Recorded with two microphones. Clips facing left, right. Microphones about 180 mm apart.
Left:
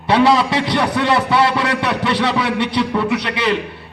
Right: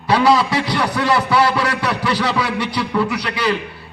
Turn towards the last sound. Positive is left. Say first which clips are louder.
# left 1 dB
turn(degrees=25)  # may be behind; listen again after turning